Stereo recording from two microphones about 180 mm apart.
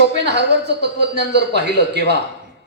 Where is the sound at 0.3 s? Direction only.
70° right (ahead or behind).